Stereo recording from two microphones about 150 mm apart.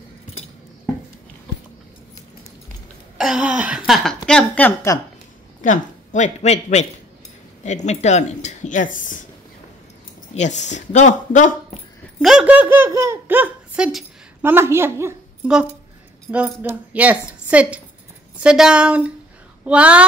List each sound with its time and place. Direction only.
3.2 s a sound: 5° right (ahead or behind)
4.3 s speech: 10° left (ahead or behind)
5.6 s speech: 55° left (ahead or behind)
10.3 s speech: 50° left (ahead or behind)
12.2 s speech: 5° right (ahead or behind)
15.4 s a woman's voice: 5° right (ahead or behind)